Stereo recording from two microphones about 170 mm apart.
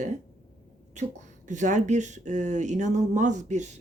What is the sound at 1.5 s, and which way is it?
Speech, 45° right (ahead or behind).